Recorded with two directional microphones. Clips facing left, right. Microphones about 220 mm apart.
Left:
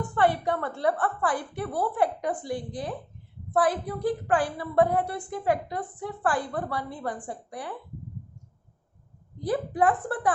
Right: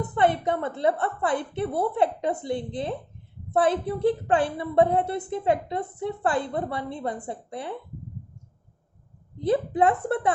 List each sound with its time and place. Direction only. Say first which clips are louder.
0.0 s a woman's voice: right 1 dB; 20° right (ahead or behind)
9.4 s a woman's voice: right 3 dB; 25° right (ahead or behind)